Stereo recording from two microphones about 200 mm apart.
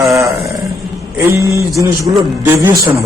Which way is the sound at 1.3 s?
15° right (ahead or behind).